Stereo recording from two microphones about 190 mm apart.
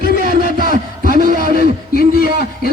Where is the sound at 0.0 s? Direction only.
50° left (ahead or behind).